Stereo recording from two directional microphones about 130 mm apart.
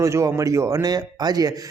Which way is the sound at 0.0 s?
25° right (ahead or behind).